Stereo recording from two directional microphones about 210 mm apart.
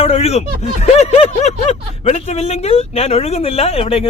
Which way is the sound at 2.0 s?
30° left (ahead or behind).